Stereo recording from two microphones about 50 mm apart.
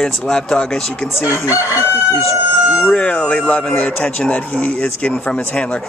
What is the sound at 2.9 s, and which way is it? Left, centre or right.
Speech, left.